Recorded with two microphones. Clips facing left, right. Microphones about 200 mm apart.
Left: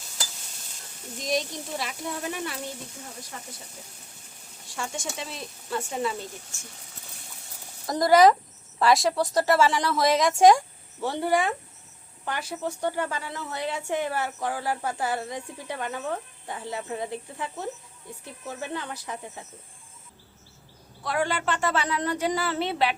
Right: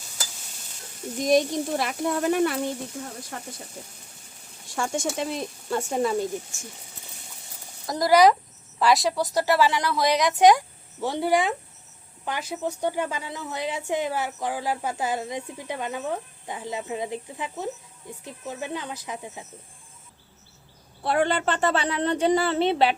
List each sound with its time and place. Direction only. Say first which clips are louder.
1.2 s speech: right 8 dB; 55° right (ahead or behind)
4.7 s speech: right 7 dB; 50° right (ahead or behind)
7.9 s speech: even; centre (ahead or behind)
11.0 s a woman's voice: right 2 dB; 15° right (ahead or behind)
21.0 s a woman's voice: right 4 dB; 30° right (ahead or behind)